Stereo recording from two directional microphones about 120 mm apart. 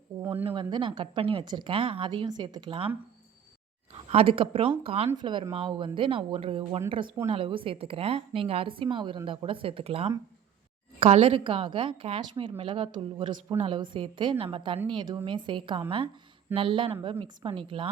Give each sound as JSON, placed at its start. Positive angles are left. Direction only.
{"t": 0.4, "sound": "a woman's voice", "side_deg": -45}
{"t": 4.1, "sound": "a woman's voice", "side_deg": -50}
{"t": 5.1, "sound": "a woman's voice", "side_deg": -40}